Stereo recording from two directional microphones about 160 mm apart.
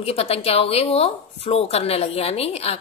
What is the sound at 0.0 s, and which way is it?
Speech, 40° left (ahead or behind).